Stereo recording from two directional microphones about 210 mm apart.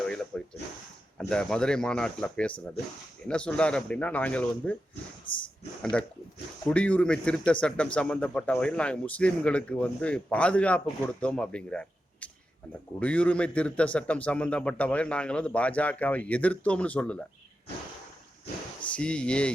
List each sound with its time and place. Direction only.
0.3 s a sound: 5° left (ahead or behind)
1.2 s a man's voice: 5° left (ahead or behind)
5.3 s speech: 25° left (ahead or behind)
5.8 s a man's voice: 5° left (ahead or behind)
18.9 s a man's voice: 5° left (ahead or behind)